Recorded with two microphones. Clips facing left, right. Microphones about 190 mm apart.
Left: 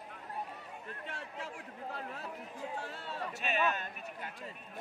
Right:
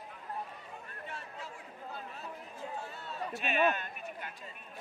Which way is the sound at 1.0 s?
90° left.